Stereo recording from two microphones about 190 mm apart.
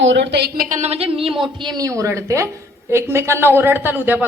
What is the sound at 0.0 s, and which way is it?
A man's voice, 70° right (ahead or behind).